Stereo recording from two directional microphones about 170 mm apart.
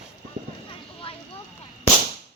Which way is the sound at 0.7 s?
30° left (ahead or behind).